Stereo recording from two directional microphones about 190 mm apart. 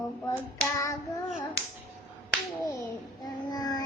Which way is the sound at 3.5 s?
20° left (ahead or behind).